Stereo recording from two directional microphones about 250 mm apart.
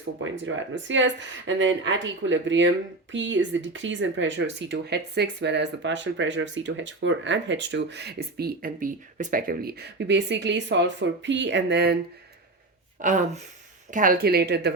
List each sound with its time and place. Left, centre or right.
0.3 s speech: right
13.0 s speech: right